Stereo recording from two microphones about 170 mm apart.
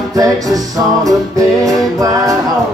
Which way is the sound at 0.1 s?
20° right (ahead or behind).